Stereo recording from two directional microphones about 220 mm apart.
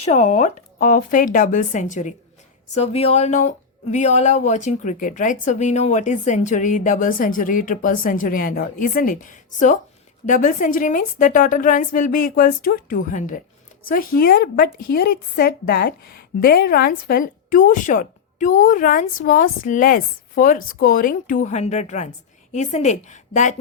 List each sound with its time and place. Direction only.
0.0 s speech: 35° left (ahead or behind)